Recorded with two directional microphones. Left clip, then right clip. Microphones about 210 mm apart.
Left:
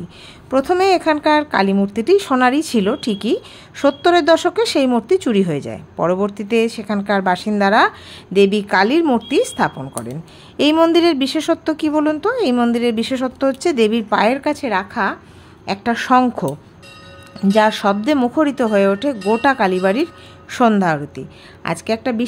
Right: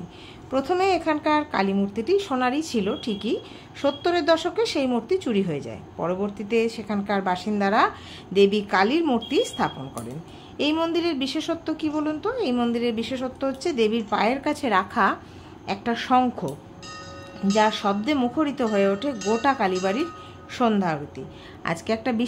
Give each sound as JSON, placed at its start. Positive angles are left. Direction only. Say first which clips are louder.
{"t": 0.5, "sound": "a woman's voice", "louder": "left 8 dB", "side_deg": 30}
{"t": 15.6, "sound": "a woman's voice", "louder": "left 7 dB", "side_deg": 25}
{"t": 21.6, "sound": "a woman's voice", "louder": "left 6 dB", "side_deg": 20}